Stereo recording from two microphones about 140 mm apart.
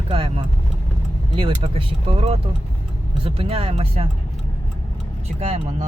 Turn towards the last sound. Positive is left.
turn(degrees=-50)  # may be behind; listen again after turning